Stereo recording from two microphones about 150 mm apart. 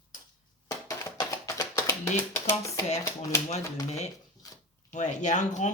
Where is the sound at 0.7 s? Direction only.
20° left (ahead or behind).